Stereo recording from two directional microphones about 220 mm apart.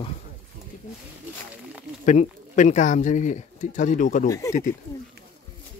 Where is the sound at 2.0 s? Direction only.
35° left (ahead or behind).